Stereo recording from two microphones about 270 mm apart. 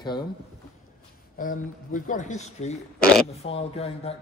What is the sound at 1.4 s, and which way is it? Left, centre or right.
Speech, left.